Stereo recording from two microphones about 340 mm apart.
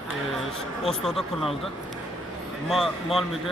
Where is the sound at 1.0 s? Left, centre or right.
Centre.